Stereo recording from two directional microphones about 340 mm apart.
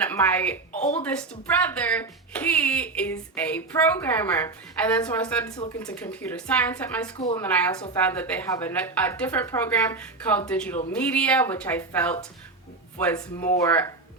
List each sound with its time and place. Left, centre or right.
0.0 s a woman's voice: centre
0.7 s a sound: left
1.6 s speech: centre